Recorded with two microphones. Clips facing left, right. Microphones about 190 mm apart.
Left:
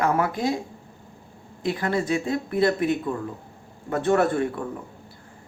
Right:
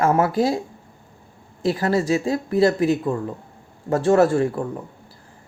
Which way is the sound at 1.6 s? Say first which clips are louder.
Right 4 dB; 40° right (ahead or behind).